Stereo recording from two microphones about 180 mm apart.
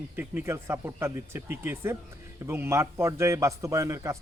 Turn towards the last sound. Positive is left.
turn(degrees=-15)  # may be behind; listen again after turning